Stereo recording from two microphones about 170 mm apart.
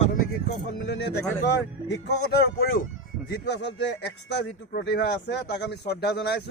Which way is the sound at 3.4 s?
85° left.